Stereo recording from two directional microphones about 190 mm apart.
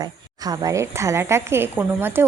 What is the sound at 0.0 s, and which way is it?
A woman's voice, 20° right (ahead or behind).